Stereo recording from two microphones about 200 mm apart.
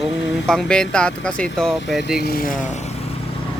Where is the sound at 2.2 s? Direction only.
45° left (ahead or behind).